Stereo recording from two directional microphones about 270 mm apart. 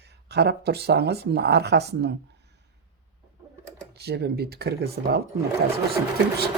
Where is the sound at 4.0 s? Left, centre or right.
Right.